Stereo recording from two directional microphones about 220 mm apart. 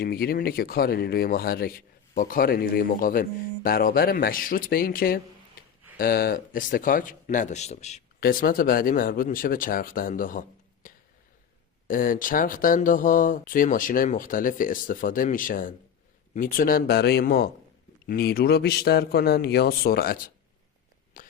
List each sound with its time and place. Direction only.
0.0 s speech: 45° left (ahead or behind)
8.2 s speech: 40° left (ahead or behind)
10.8 s a sound: 40° left (ahead or behind)
11.9 s a man's voice: 40° left (ahead or behind)
21.2 s whispering: 40° left (ahead or behind)